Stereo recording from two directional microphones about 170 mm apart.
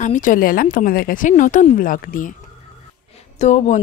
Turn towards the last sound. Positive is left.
turn(degrees=40)  # may be behind; listen again after turning